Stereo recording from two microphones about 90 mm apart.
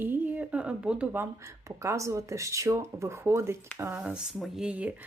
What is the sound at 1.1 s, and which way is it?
Speech, 25° right (ahead or behind).